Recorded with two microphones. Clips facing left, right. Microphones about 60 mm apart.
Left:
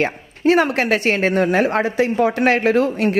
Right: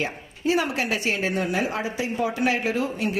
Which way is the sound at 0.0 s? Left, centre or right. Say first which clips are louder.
Left 8 dB; left.